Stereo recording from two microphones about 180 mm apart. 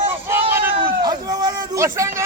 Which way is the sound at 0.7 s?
25° right (ahead or behind).